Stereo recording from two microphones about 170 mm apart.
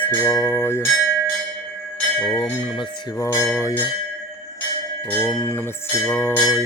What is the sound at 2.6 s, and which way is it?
Bell, 20° left (ahead or behind).